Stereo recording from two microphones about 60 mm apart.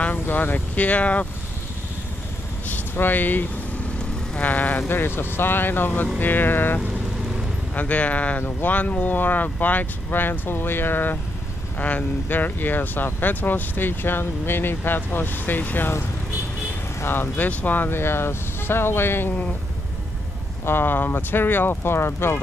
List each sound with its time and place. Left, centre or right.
0.0 s speech: left
3.0 s speech: left
7.7 s speech: left
17.0 s speech: left
20.6 s speech: left